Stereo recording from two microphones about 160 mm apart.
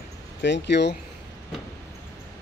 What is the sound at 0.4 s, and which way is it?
Speech, 90° left.